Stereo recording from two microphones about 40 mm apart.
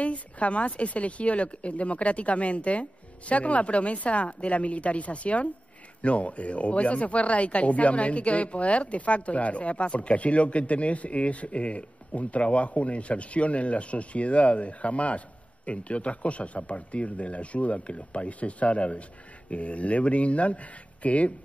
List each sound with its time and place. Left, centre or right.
0.0 s speech: left